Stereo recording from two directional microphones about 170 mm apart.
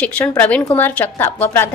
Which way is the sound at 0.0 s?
5° left (ahead or behind).